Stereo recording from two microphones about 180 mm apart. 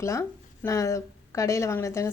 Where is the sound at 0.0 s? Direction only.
15° left (ahead or behind).